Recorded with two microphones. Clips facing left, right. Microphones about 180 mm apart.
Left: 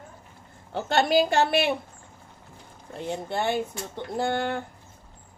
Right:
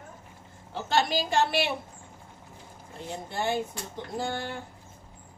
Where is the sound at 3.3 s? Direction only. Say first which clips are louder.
Left 2 dB; 65° left (ahead or behind).